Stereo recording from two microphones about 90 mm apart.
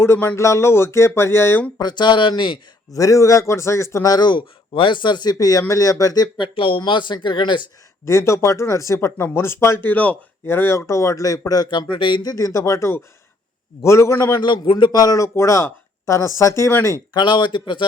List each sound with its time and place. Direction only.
0.0 s speech: 30° left (ahead or behind)
1.8 s speech: 55° left (ahead or behind)
2.9 s speech: 40° left (ahead or behind)
4.1 s speech: 55° left (ahead or behind)
6.4 s speech: 75° left (ahead or behind); by 7.6 s 60° left (ahead or behind)
8.0 s speech: 30° left (ahead or behind)
11.7 s speech: 65° left (ahead or behind)
12.2 s speech: 45° left (ahead or behind)
14.3 s speech: 55° left (ahead or behind); by 16.9 s 30° left (ahead or behind)
17.2 s speech: 60° left (ahead or behind)